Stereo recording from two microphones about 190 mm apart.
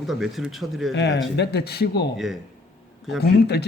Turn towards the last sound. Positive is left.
turn(degrees=60)  # may be behind; listen again after turning